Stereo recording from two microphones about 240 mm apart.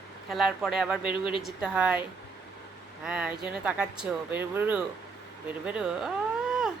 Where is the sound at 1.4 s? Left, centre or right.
Centre.